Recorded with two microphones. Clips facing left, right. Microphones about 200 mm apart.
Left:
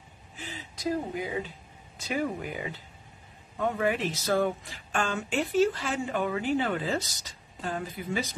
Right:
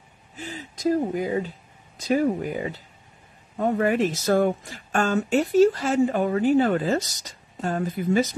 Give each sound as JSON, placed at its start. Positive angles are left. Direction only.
{"t": 0.4, "sound": "speech", "side_deg": -45}